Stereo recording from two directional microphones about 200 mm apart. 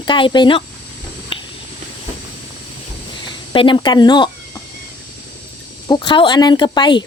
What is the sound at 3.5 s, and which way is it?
Speech, 25° left (ahead or behind).